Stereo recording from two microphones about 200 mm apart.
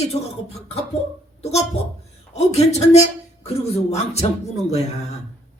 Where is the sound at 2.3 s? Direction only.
30° left (ahead or behind).